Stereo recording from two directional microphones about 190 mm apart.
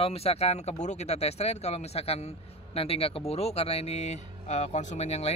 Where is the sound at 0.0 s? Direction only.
30° left (ahead or behind).